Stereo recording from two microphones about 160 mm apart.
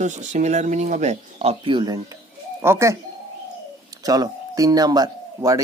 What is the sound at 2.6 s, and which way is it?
Speech, 15° right (ahead or behind).